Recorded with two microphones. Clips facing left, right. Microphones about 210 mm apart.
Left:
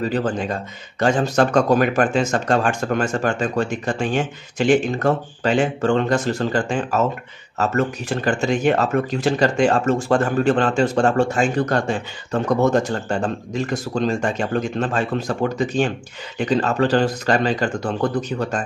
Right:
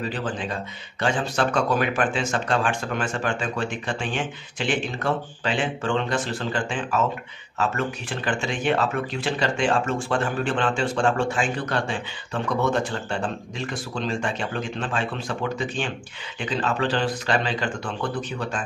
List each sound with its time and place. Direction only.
0.1 s a man's voice: 45° left (ahead or behind)